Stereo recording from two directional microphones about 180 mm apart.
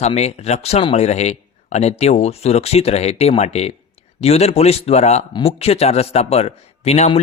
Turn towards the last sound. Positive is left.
turn(degrees=35)  # may be behind; listen again after turning